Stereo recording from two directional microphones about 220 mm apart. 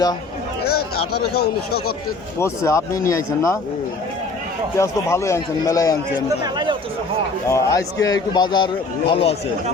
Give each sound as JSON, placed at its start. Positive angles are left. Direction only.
{"t": 1.1, "sound": "speech", "side_deg": 45}
{"t": 2.4, "sound": "speech", "side_deg": 15}
{"t": 4.8, "sound": "speech", "side_deg": 15}
{"t": 6.4, "sound": "speech", "side_deg": -20}
{"t": 7.4, "sound": "a man's voice", "side_deg": 15}